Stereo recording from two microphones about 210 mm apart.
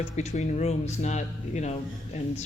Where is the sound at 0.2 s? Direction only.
35° left (ahead or behind).